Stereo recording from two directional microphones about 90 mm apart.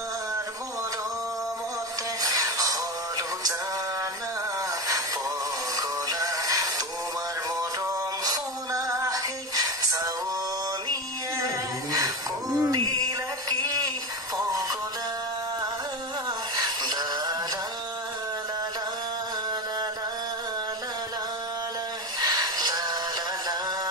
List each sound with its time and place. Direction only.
2.2 s music: 40° right (ahead or behind)
5.8 s synthetic singing: 45° right (ahead or behind)
7.8 s music: 45° right (ahead or behind)
12.5 s music: 45° right (ahead or behind)
16.5 s synthetic singing: 50° right (ahead or behind)
22.2 s music: 50° right (ahead or behind)